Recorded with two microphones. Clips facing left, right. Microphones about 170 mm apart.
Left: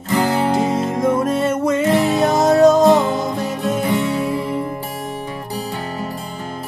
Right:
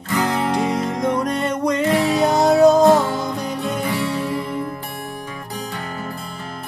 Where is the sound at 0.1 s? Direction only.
30° left (ahead or behind).